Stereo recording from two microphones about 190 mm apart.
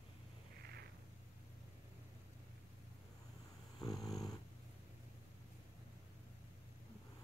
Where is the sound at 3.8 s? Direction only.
20° left (ahead or behind).